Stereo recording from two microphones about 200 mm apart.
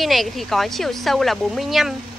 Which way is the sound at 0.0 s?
Centre (ahead or behind).